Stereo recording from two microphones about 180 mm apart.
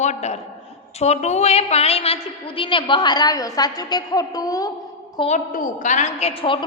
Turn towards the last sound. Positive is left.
turn(degrees=30)  # may be behind; listen again after turning